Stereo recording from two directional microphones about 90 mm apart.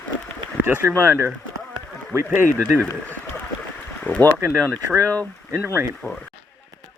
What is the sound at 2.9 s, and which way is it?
Speech, 15° left (ahead or behind).